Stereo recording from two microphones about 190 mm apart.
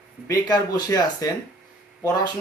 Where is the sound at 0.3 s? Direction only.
20° left (ahead or behind).